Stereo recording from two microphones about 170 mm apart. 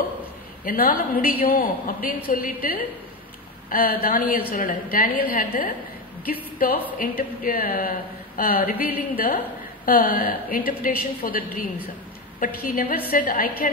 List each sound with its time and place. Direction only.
0.7 s a woman's voice: 60° left (ahead or behind)